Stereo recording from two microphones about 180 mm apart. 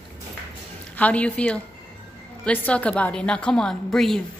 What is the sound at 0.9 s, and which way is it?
A woman's voice, 10° left (ahead or behind).